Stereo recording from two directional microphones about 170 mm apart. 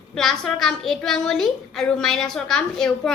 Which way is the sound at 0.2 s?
Centre (ahead or behind).